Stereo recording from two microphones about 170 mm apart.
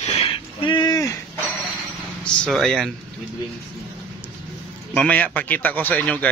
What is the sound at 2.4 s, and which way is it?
Speech, centre (ahead or behind).